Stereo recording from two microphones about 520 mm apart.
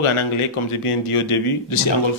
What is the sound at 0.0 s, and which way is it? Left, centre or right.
A man's voice, left.